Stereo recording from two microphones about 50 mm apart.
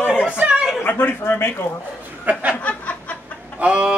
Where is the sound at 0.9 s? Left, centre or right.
Left.